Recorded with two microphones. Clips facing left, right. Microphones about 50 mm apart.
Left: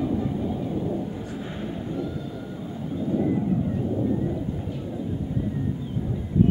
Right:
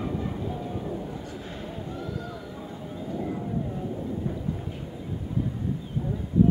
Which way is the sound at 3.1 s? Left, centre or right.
Centre.